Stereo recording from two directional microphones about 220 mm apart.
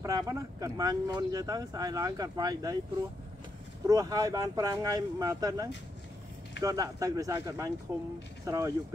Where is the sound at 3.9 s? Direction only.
15° right (ahead or behind).